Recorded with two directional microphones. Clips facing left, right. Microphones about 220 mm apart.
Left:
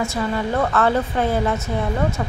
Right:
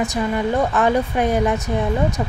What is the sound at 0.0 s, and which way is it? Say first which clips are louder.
A woman's voice: right 2 dB; 15° right (ahead or behind).